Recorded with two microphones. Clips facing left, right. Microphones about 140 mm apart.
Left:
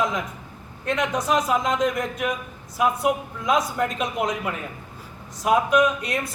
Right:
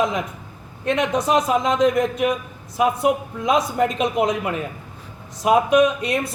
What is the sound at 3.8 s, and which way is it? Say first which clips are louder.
Speech: right 5 dB; 25° right (ahead or behind).